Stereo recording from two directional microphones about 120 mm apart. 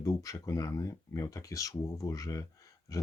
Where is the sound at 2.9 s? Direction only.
30° left (ahead or behind).